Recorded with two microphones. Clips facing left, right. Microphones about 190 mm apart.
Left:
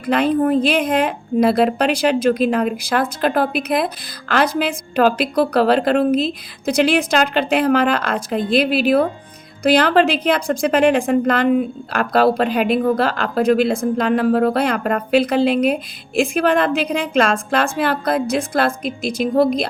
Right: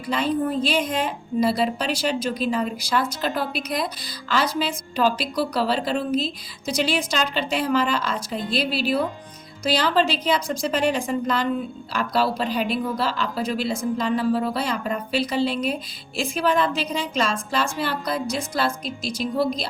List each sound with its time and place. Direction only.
0.0 s a woman's voice: 60° left (ahead or behind)